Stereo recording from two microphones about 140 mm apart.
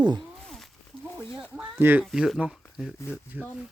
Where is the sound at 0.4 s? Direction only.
5° left (ahead or behind).